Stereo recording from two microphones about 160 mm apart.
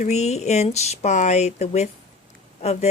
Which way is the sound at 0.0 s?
45° left (ahead or behind).